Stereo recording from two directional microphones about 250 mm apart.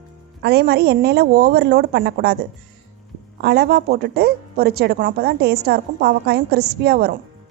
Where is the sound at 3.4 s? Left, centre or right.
Right.